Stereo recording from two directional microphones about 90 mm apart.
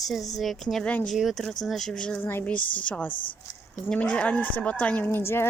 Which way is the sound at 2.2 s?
25° left (ahead or behind).